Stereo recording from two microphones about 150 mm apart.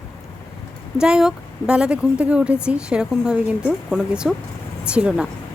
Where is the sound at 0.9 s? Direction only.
5° right (ahead or behind).